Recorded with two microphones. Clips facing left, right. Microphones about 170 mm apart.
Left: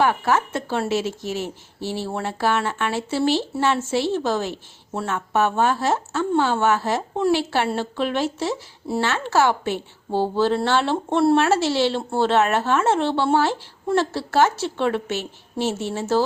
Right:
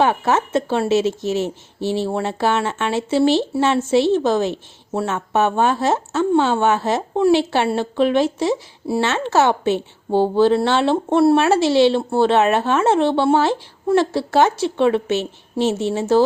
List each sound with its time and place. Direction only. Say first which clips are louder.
0.0 s a woman's voice: right 2 dB; 20° right (ahead or behind)